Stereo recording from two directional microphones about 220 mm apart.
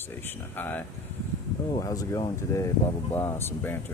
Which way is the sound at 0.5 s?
10° left (ahead or behind).